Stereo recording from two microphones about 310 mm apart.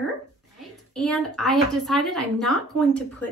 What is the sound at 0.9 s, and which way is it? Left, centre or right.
Speech, centre.